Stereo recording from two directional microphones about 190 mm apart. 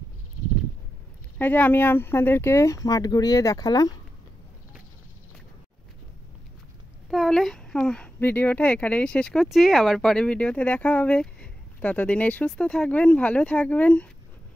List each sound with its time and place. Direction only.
1.4 s speech: 10° left (ahead or behind)
7.1 s speech: centre (ahead or behind)